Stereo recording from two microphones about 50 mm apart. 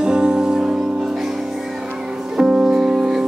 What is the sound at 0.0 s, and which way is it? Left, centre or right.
Music, centre.